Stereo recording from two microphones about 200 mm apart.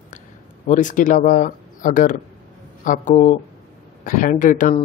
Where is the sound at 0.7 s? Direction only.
40° left (ahead or behind).